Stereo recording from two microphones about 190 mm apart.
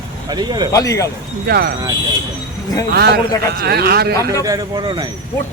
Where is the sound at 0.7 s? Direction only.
15° left (ahead or behind).